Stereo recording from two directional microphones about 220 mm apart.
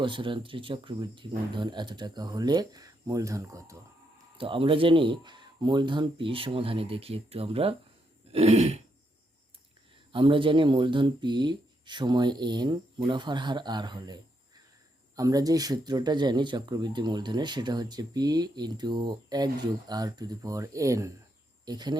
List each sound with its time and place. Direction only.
0.0 s speech: 20° right (ahead or behind)
10.1 s speech: 20° right (ahead or behind)